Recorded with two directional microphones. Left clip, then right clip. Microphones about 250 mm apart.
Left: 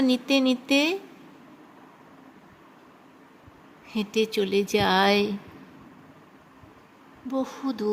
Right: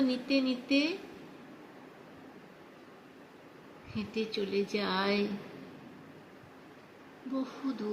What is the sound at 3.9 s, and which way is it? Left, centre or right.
Speech, left.